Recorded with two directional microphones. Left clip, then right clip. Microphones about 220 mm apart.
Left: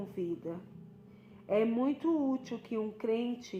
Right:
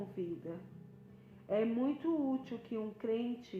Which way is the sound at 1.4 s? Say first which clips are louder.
Left 4 dB; 35° left (ahead or behind).